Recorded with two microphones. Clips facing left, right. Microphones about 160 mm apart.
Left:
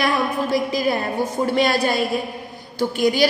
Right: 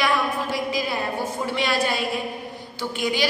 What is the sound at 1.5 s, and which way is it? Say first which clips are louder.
A woman's voice: left 5 dB; 40° left (ahead or behind).